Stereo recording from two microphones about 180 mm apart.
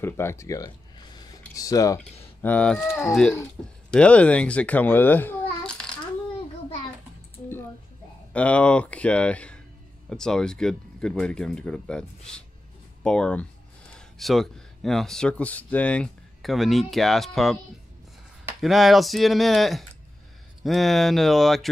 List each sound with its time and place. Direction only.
0.0 s speech: 15° left (ahead or behind)
2.4 s a child's voice: 5° left (ahead or behind)
8.3 s speech: 5° left (ahead or behind)
18.6 s speech: centre (ahead or behind)